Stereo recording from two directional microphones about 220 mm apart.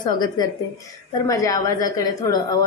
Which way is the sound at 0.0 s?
20° left (ahead or behind).